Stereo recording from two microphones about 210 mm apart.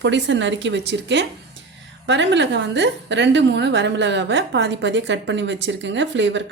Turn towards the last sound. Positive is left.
turn(degrees=-60)  # may be behind; listen again after turning